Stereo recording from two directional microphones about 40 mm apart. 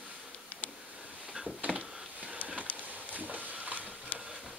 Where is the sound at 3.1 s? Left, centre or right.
Right.